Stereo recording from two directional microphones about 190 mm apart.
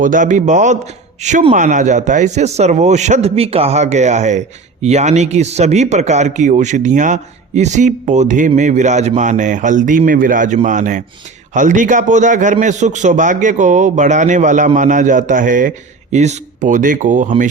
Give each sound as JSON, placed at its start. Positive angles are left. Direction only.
{"t": 0.0, "sound": "speech", "side_deg": -40}